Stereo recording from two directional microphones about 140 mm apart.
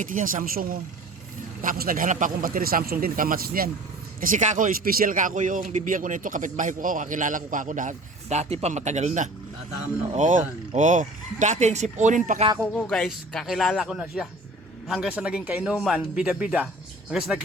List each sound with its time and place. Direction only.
0.0 s a man's voice: 75° right (ahead or behind); by 3.7 s 90° right
4.2 s a man's voice: 70° right (ahead or behind)
12.7 s speech: 5° left (ahead or behind)